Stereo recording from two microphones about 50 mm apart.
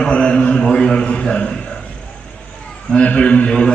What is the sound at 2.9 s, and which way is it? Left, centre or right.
Speech, left.